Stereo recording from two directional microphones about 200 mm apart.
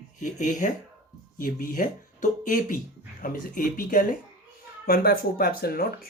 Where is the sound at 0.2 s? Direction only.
40° left (ahead or behind).